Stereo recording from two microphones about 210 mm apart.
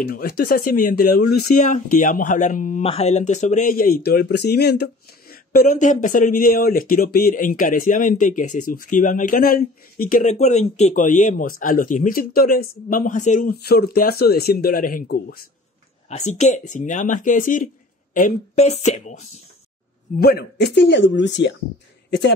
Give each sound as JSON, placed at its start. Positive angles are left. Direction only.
{"t": 0.0, "sound": "speech", "side_deg": 45}
{"t": 16.1, "sound": "speech", "side_deg": 30}
{"t": 20.2, "sound": "speech", "side_deg": 50}